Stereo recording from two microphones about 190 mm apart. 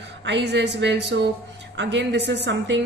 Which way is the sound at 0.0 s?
65° right (ahead or behind).